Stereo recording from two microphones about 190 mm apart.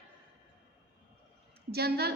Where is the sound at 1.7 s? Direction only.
55° right (ahead or behind).